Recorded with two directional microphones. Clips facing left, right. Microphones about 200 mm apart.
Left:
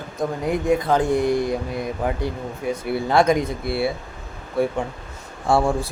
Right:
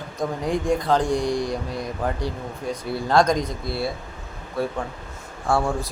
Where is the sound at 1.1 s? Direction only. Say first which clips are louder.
Left 3 dB; 55° left (ahead or behind).